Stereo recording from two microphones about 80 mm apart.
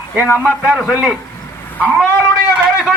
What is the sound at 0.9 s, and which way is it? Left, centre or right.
Speech, centre.